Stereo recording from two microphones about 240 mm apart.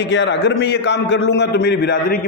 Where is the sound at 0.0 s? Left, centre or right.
Left.